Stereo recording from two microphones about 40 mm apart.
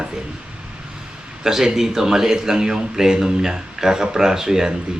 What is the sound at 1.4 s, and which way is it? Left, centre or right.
A man's voice, centre.